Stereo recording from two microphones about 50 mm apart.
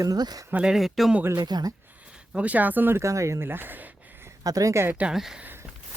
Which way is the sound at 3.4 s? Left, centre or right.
Right.